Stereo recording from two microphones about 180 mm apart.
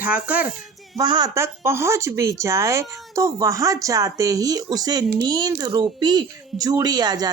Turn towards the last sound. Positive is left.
turn(degrees=-20)  # may be behind; listen again after turning